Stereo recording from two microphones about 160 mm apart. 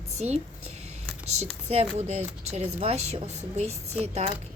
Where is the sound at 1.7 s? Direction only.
40° right (ahead or behind).